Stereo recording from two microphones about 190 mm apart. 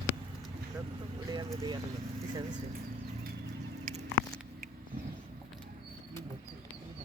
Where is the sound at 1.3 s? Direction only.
20° right (ahead or behind).